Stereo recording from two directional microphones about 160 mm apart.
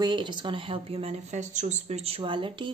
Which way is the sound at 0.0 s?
30° right (ahead or behind).